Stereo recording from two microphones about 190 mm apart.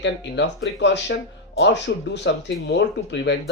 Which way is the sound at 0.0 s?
70° left (ahead or behind).